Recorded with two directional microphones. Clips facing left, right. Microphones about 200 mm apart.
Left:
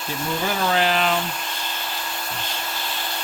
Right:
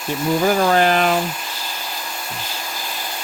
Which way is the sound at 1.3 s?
5° right (ahead or behind).